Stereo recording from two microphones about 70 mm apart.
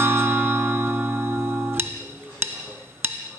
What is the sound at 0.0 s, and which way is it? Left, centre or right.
Bell, right.